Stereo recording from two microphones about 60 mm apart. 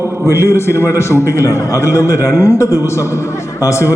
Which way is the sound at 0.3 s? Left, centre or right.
Left.